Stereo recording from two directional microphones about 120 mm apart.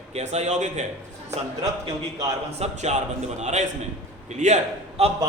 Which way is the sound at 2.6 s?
75° right (ahead or behind).